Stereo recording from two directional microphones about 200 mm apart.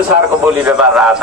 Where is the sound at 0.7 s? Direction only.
5° right (ahead or behind).